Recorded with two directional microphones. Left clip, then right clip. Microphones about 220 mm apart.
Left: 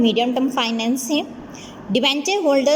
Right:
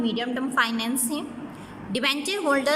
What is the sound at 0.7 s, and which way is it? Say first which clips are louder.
Speech: left 6 dB; 20° right (ahead or behind).